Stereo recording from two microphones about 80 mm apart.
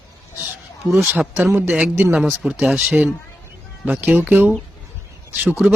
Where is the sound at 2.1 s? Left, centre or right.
Centre.